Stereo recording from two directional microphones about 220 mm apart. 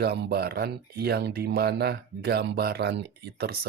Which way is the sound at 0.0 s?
50° right (ahead or behind).